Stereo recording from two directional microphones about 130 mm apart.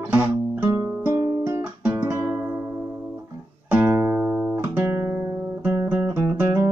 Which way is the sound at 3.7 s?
20° right (ahead or behind).